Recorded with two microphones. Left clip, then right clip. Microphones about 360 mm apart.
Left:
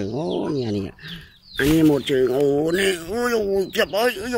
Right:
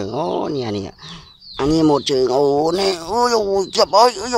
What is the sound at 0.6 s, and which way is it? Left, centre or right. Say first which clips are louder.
Speech: right 2 dB; centre.